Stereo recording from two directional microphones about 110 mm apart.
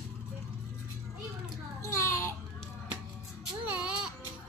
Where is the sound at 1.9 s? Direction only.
25° left (ahead or behind).